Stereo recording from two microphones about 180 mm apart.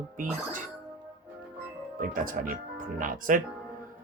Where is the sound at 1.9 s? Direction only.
50° right (ahead or behind).